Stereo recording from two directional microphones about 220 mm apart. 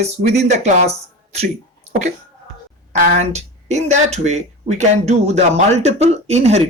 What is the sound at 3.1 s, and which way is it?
Speech, 30° right (ahead or behind).